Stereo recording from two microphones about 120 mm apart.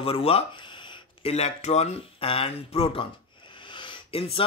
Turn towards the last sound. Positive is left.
turn(degrees=50)  # may be behind; listen again after turning